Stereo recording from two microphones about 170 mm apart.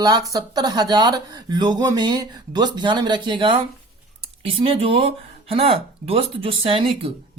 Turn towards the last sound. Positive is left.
turn(degrees=-35)  # may be behind; listen again after turning